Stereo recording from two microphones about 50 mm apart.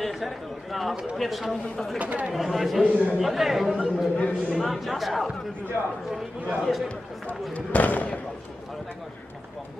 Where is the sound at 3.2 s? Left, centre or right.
Centre.